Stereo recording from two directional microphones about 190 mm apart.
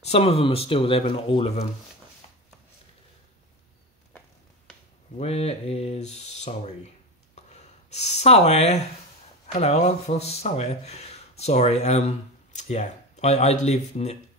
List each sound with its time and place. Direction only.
0.0 s speech: 35° left (ahead or behind)
5.1 s speech: 35° left (ahead or behind)